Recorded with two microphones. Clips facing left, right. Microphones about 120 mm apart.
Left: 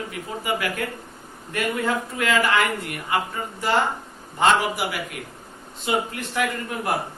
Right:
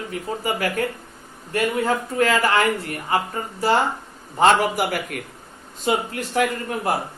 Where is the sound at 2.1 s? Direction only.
35° right (ahead or behind).